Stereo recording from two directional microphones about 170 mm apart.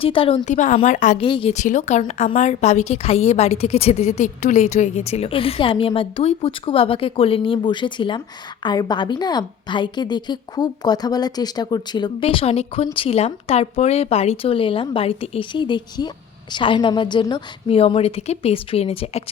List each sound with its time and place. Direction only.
0.0 s a woman's voice: 35° left (ahead or behind); by 1.2 s 50° left (ahead or behind)
1.2 s a woman's voice: 30° left (ahead or behind)
1.5 s a woman's voice: 45° left (ahead or behind)